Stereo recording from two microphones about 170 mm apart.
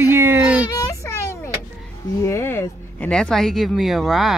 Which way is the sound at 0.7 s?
20° left (ahead or behind).